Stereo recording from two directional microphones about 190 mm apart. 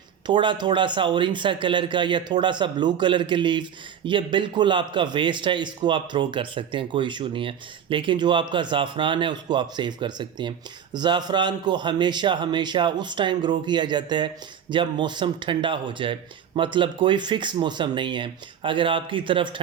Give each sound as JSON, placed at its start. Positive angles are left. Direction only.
{"t": 0.3, "sound": "speech", "side_deg": -25}